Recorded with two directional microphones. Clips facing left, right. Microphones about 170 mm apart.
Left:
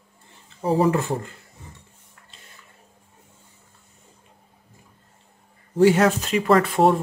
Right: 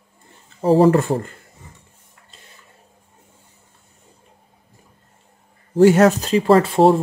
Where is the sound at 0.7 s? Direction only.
75° right (ahead or behind).